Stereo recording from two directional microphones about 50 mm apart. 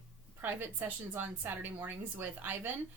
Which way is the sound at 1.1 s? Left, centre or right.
Right.